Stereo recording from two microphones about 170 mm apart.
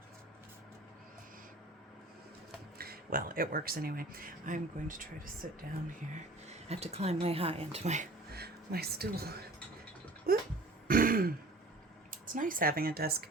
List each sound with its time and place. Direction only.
2.7 s speech: 60° right (ahead or behind)
5.9 s a woman's voice: 40° right (ahead or behind)
8.3 s speech: 65° right (ahead or behind)
10.3 s a sound: 60° right (ahead or behind)
10.8 s throat clearing: 55° right (ahead or behind)
12.1 s speech: 50° right (ahead or behind)